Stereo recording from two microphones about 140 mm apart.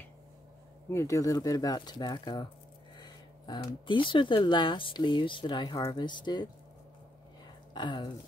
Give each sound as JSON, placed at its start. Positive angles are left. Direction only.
{"t": 0.8, "sound": "speech", "side_deg": 20}
{"t": 7.7, "sound": "speech", "side_deg": 35}